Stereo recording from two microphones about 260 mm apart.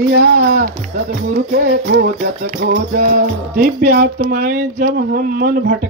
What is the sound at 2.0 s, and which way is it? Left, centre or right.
Music, right.